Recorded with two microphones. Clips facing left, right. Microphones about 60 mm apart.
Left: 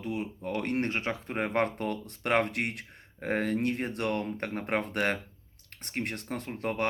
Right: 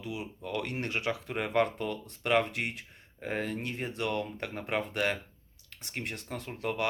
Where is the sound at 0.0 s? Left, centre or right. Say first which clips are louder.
Left 4 dB; left.